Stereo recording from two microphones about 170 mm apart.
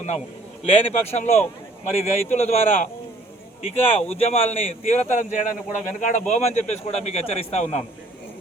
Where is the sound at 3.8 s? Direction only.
35° left (ahead or behind).